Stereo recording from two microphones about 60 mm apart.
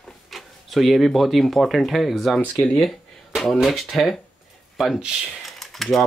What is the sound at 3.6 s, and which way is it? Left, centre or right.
Speech, centre.